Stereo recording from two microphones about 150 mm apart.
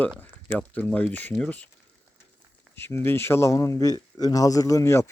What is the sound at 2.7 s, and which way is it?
Speech, 15° left (ahead or behind).